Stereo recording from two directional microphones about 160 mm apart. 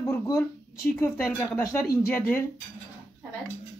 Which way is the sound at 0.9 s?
15° left (ahead or behind).